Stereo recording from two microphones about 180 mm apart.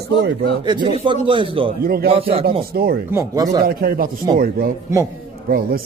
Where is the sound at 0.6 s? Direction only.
25° right (ahead or behind).